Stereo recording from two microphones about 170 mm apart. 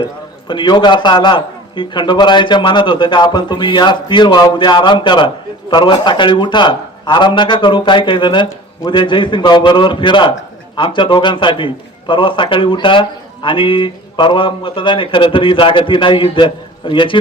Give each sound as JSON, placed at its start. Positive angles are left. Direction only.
{"t": 0.4, "sound": "a man's voice", "side_deg": 25}